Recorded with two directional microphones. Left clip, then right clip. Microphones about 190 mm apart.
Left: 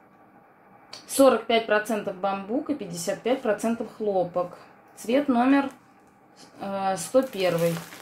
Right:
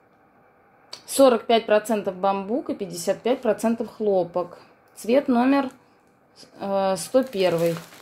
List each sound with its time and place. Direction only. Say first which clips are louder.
0.8 s speech: right 2 dB; 55° right (ahead or behind)